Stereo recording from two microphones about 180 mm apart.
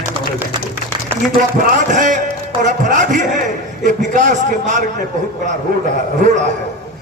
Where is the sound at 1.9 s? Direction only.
45° right (ahead or behind).